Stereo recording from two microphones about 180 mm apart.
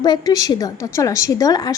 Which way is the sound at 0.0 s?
20° left (ahead or behind).